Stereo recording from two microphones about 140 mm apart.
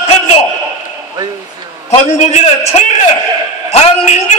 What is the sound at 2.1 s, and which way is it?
A man's voice, 55° left (ahead or behind).